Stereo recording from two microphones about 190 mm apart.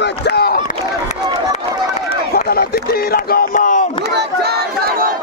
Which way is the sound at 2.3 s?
55° left (ahead or behind).